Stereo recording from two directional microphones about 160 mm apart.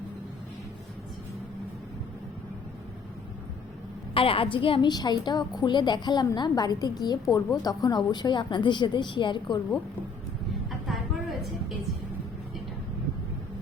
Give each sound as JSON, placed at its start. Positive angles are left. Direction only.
{"t": 4.1, "sound": "a woman's voice", "side_deg": 35}
{"t": 10.7, "sound": "vehicle", "side_deg": 0}